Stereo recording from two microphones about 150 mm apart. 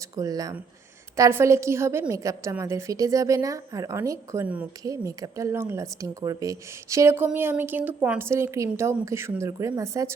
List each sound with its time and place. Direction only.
0.2 s a woman's voice: 25° right (ahead or behind)